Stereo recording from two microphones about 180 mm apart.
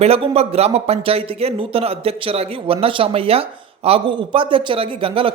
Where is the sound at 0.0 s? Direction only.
35° right (ahead or behind).